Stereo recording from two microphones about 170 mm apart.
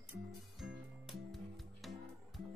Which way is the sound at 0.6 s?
Centre (ahead or behind).